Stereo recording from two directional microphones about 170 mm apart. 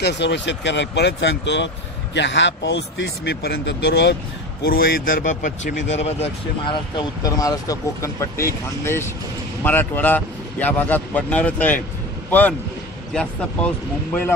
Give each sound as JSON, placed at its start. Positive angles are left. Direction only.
{"t": 0.0, "sound": "speech", "side_deg": 90}
{"t": 4.6, "sound": "a man's voice", "side_deg": 60}
{"t": 7.0, "sound": "speech", "side_deg": 20}